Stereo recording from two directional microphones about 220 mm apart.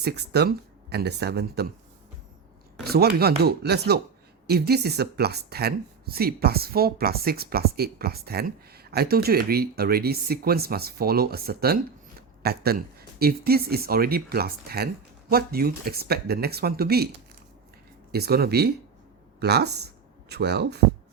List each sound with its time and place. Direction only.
0.0 s speech: 45° right (ahead or behind)
2.8 s speech: 45° right (ahead or behind)
18.1 s speech: 45° right (ahead or behind)